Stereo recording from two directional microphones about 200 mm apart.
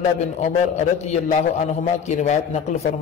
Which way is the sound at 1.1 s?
35° left (ahead or behind).